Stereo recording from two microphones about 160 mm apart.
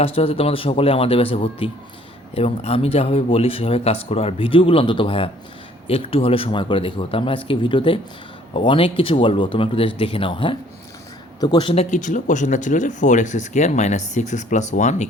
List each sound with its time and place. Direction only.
0.0 s speech: 35° left (ahead or behind)